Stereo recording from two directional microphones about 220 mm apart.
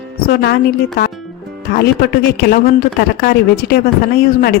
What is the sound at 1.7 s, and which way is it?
A woman's voice, 45° left (ahead or behind).